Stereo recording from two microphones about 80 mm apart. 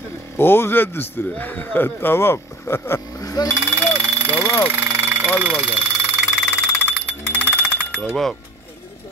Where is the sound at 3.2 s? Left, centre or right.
Left.